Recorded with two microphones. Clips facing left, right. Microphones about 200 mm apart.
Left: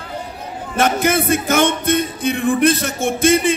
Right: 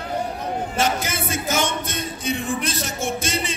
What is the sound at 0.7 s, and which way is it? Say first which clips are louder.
Music: left 10 dB; 55° left (ahead or behind).